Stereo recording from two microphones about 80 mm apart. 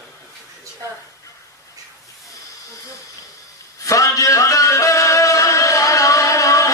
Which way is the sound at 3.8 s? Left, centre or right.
Left.